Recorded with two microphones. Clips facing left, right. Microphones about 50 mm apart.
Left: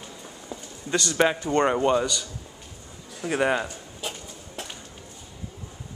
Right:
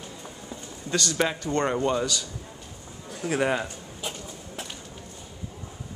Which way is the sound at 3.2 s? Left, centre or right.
Centre.